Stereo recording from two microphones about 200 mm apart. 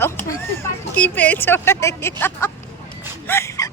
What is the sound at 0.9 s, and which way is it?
Speech, 5° left (ahead or behind).